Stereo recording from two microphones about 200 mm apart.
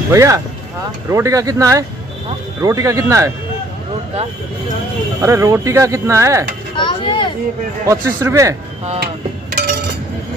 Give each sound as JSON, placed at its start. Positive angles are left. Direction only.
{"t": 0.1, "sound": "speech", "side_deg": -15}
{"t": 5.2, "sound": "speech", "side_deg": -15}
{"t": 6.8, "sound": "chop", "side_deg": 25}
{"t": 7.8, "sound": "speech", "side_deg": -15}